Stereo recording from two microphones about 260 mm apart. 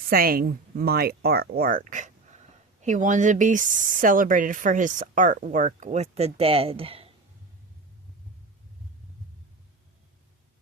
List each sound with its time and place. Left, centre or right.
0.1 s speech: right